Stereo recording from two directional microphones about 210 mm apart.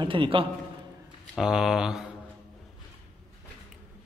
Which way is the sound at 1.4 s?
Centre (ahead or behind).